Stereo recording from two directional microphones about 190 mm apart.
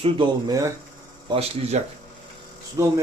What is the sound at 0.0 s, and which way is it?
Speech, 20° right (ahead or behind).